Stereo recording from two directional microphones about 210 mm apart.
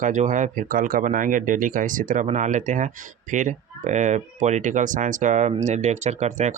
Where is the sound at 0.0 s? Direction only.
35° right (ahead or behind).